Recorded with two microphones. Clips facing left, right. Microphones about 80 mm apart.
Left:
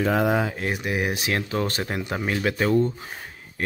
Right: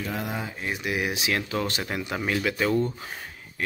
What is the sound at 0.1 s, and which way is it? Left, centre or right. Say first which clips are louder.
Speech: left 10 dB; left.